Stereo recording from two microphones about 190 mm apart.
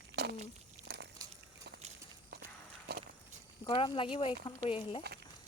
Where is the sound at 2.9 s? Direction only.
55° right (ahead or behind).